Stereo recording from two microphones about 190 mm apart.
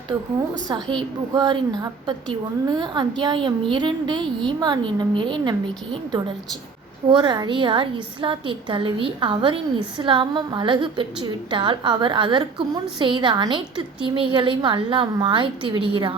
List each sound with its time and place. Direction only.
0.7 s a woman's voice: 25° right (ahead or behind)